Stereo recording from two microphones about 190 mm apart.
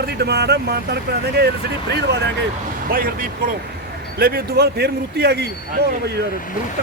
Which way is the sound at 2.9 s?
50° right (ahead or behind).